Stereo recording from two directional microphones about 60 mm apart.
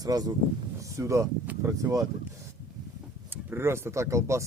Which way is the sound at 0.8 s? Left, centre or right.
Right.